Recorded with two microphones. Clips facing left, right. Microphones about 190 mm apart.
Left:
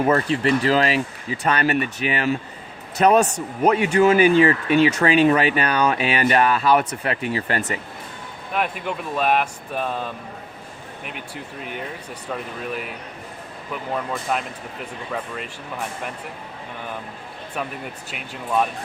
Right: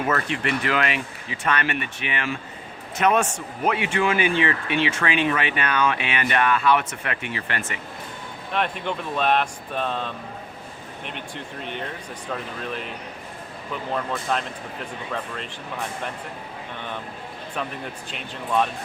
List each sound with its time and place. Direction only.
0.0 s a man's voice: 30° left (ahead or behind)
8.5 s speech: 5° left (ahead or behind)
13.9 s speech: 5° left (ahead or behind)
18.1 s speech: 5° left (ahead or behind)